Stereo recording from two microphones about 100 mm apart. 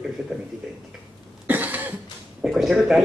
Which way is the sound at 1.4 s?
15° right (ahead or behind).